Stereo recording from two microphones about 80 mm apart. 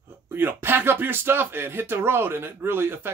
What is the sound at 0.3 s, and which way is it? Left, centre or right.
Speech, right.